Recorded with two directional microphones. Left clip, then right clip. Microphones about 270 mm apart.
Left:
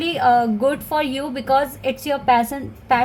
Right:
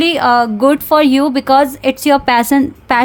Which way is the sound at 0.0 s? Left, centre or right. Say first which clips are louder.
Right 5 dB; right.